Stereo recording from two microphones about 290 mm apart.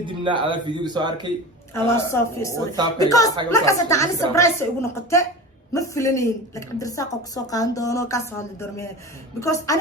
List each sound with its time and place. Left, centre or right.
0.0 s speech: centre
1.7 s a woman's voice: centre